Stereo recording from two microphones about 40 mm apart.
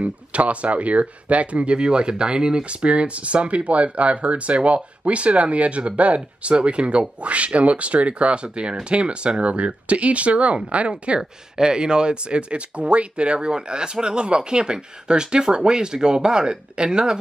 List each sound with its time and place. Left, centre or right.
0.0 s speech: right
11.1 s speech: centre